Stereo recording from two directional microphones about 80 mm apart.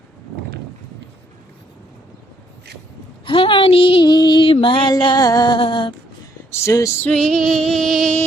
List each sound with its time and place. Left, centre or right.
3.2 s a sound: left
6.5 s speech: left
7.0 s female singing: centre